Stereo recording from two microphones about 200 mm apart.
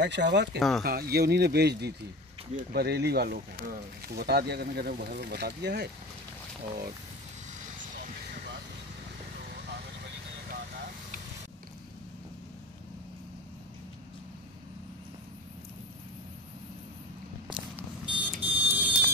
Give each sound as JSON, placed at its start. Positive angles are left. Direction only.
{"t": 0.0, "sound": "speech", "side_deg": -60}
{"t": 0.6, "sound": "speech", "side_deg": 0}
{"t": 0.8, "sound": "speech", "side_deg": -50}
{"t": 17.5, "sound": "a sound", "side_deg": -5}